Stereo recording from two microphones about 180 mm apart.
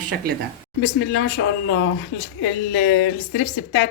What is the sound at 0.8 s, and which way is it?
Speech, 70° left (ahead or behind).